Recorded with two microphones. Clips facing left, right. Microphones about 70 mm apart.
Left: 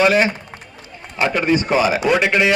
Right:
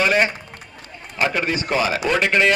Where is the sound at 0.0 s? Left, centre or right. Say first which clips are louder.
Left 3 dB; centre.